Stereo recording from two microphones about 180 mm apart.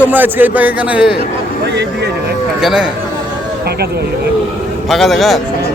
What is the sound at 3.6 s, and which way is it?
Speech, 60° right (ahead or behind).